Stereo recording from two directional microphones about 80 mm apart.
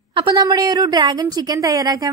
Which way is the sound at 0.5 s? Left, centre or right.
Right.